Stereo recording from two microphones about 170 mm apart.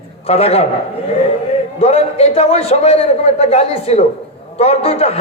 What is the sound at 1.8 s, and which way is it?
A man's voice, 35° left (ahead or behind).